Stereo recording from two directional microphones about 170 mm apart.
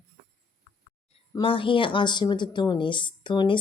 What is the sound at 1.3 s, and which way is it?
Speech, 30° left (ahead or behind).